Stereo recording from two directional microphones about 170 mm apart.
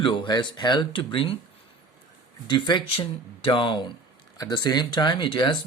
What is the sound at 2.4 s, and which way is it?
Speech, 30° left (ahead or behind).